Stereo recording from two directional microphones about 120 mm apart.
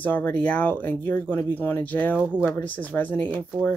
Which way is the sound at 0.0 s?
15° left (ahead or behind).